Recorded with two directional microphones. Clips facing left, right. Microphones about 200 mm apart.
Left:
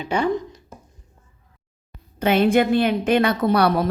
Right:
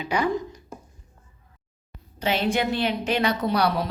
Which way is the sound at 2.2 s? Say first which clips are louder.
Left 7 dB; 55° left (ahead or behind).